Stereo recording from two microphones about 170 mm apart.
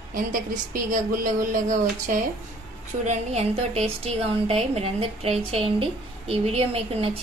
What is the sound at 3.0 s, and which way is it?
A woman's voice, 40° right (ahead or behind).